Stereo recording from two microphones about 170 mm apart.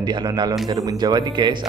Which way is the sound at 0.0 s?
25° right (ahead or behind).